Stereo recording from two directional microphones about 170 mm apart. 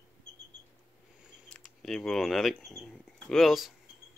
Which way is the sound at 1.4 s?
5° left (ahead or behind).